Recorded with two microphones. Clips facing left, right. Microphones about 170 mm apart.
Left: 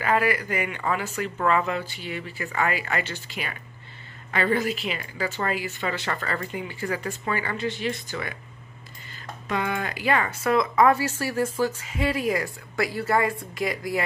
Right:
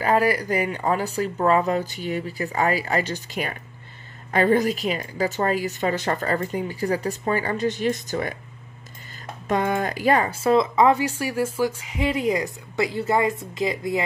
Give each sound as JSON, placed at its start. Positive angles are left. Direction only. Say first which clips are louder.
{"t": 0.0, "sound": "a woman's voice", "louder": "right 3 dB", "side_deg": -40}
{"t": 9.5, "sound": "speech", "louder": "right 5 dB", "side_deg": -45}
{"t": 10.3, "sound": "speech", "louder": "right 3 dB", "side_deg": -25}